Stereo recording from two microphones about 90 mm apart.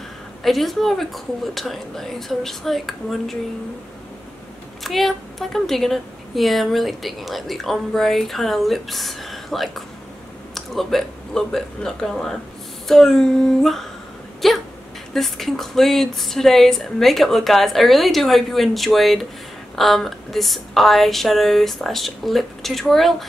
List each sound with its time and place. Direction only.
0.4 s speech: centre (ahead or behind)
4.8 s speech: centre (ahead or behind)